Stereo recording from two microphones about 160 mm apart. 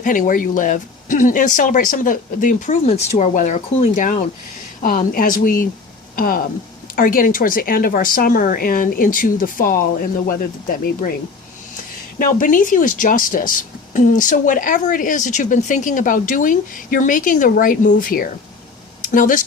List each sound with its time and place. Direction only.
0.0 s speech: 55° left (ahead or behind)
4.8 s speech: 60° left (ahead or behind)
12.2 s speech: 55° left (ahead or behind)